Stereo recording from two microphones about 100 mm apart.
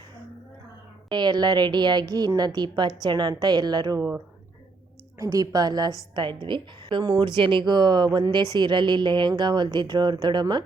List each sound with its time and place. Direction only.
1.1 s a woman's voice: 50° right (ahead or behind)
5.1 s a woman's voice: 35° right (ahead or behind)